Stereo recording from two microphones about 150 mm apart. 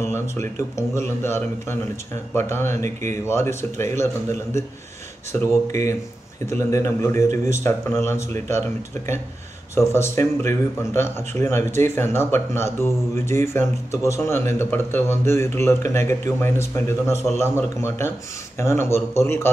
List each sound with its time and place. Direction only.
0.0 s a man's voice: 20° left (ahead or behind)